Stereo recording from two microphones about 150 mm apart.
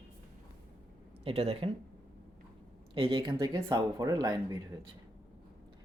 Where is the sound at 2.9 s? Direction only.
35° right (ahead or behind).